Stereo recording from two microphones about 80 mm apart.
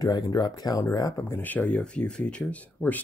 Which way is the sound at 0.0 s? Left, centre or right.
Left.